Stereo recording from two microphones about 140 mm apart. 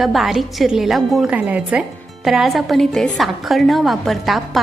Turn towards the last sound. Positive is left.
turn(degrees=0)  # may be behind; listen again after turning